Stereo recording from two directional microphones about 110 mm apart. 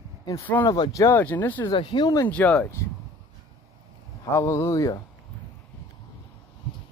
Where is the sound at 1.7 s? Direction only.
45° left (ahead or behind).